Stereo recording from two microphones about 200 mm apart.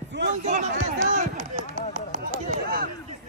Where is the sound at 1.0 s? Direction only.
40° right (ahead or behind).